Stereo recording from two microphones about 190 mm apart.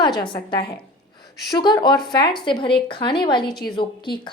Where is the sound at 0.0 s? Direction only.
25° left (ahead or behind).